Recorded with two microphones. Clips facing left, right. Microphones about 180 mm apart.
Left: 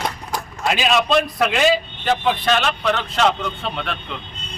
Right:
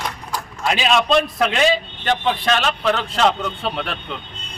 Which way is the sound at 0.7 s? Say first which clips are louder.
Right 1 dB; 5° left (ahead or behind).